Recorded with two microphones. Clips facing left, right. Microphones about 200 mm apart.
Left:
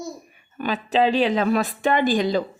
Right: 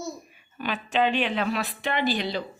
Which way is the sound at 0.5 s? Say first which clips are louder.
Left 5 dB; 40° left (ahead or behind).